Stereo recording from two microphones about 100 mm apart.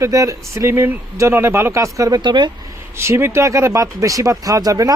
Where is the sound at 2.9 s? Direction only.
25° right (ahead or behind).